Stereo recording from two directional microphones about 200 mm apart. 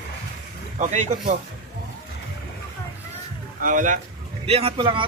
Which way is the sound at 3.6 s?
40° right (ahead or behind).